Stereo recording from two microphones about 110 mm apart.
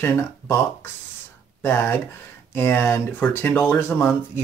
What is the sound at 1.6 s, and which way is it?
Speech, 20° left (ahead or behind).